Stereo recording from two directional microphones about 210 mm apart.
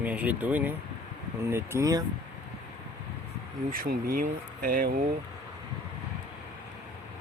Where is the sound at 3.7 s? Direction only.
45° right (ahead or behind).